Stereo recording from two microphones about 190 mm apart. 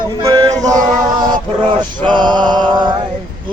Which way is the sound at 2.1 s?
25° right (ahead or behind).